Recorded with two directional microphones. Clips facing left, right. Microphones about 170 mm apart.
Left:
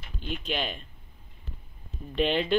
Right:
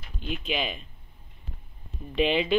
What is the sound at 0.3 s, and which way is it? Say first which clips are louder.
Speech: right 1 dB; 5° right (ahead or behind).